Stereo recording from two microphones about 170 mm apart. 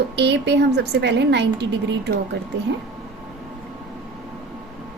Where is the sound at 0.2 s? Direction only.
85° right.